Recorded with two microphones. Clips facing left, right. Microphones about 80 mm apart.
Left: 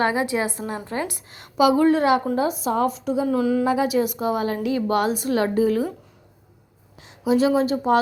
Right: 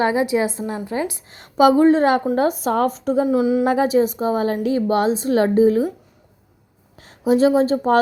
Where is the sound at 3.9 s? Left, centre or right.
Right.